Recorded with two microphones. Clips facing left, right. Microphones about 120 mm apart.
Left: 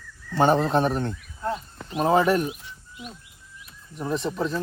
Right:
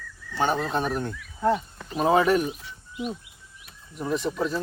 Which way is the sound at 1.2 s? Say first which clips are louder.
Right 6 dB; 75° right (ahead or behind).